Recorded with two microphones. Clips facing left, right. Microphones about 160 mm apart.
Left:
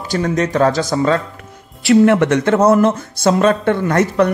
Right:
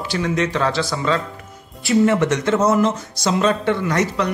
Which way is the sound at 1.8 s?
60° left (ahead or behind).